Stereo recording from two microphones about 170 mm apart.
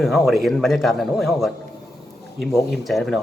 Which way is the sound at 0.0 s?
Centre (ahead or behind).